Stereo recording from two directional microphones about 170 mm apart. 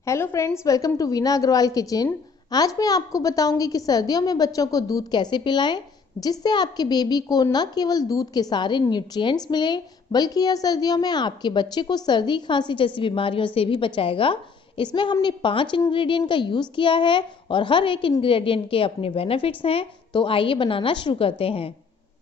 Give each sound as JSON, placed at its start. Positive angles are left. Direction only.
{"t": 0.0, "sound": "a woman's voice", "side_deg": 15}